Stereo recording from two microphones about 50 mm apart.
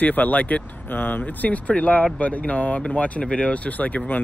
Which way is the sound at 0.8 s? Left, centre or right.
Left.